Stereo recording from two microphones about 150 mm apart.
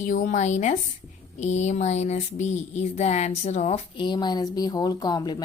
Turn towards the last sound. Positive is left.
turn(degrees=25)  # may be behind; listen again after turning